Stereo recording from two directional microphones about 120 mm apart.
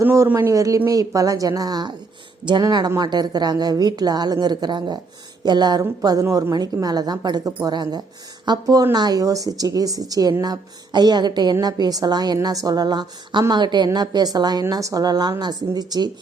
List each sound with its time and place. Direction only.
0.0 s speech: 20° right (ahead or behind)